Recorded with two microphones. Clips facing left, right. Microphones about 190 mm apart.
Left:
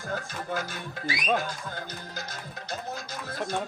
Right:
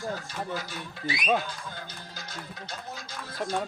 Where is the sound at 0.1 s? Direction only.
50° left (ahead or behind).